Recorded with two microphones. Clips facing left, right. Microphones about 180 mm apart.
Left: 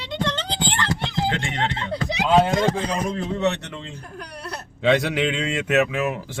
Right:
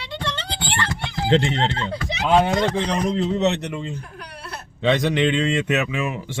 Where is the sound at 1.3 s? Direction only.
25° right (ahead or behind).